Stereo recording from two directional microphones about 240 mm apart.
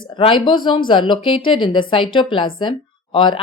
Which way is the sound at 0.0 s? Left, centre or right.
Centre.